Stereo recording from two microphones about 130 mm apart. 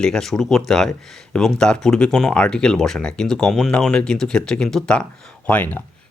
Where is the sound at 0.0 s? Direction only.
5° left (ahead or behind).